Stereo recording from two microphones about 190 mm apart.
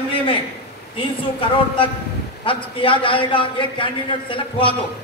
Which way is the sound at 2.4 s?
25° left (ahead or behind).